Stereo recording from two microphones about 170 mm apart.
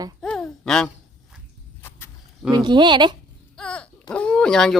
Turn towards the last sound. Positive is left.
turn(degrees=0)  # may be behind; listen again after turning